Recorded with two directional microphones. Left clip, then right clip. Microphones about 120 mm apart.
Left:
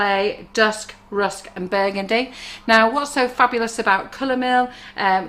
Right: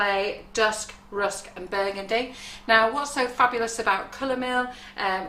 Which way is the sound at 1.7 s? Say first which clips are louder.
Left 6 dB; 30° left (ahead or behind).